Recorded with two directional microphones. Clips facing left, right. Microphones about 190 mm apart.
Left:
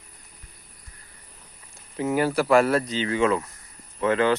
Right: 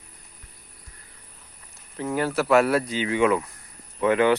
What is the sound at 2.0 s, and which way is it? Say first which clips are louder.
Speech: left 2 dB; 5° left (ahead or behind).